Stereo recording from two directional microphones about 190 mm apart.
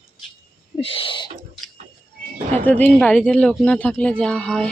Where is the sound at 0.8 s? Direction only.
30° left (ahead or behind).